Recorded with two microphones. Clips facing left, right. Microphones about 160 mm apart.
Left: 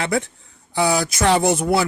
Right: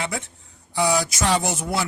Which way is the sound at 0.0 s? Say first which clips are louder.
Left 7 dB; 65° left (ahead or behind).